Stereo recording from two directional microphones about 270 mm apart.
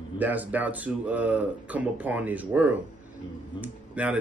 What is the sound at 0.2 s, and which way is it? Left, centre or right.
Speech, centre.